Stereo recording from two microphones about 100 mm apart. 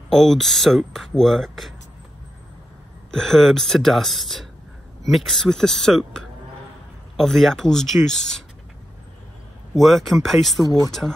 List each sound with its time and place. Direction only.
0.1 s speech: 5° left (ahead or behind)
3.1 s speech: 5° left (ahead or behind)
9.8 s speech: centre (ahead or behind)
10.6 s speech: 40° left (ahead or behind)
10.9 s speech: 5° left (ahead or behind)